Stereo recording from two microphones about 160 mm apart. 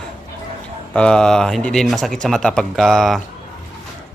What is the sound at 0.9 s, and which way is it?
Speech, 5° left (ahead or behind).